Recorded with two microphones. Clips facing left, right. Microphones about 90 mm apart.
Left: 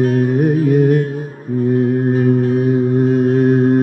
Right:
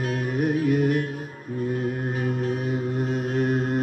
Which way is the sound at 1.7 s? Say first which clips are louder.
Left 14 dB; 35° left (ahead or behind).